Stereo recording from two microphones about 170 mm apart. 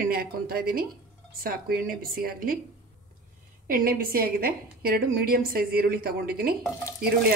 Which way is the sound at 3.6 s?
60° right (ahead or behind).